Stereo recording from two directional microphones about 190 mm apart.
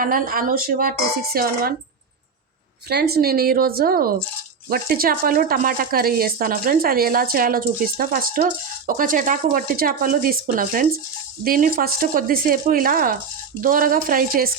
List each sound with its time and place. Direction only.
0.0 s speech: 45° right (ahead or behind)
2.9 s speech: 55° right (ahead or behind)